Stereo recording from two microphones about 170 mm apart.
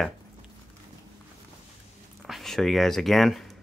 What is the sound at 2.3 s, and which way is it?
Speech, centre (ahead or behind).